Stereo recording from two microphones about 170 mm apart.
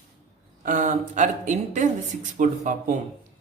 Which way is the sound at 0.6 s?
50° right (ahead or behind).